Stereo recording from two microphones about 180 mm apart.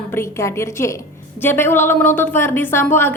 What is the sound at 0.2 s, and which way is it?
A woman's voice, 15° left (ahead or behind).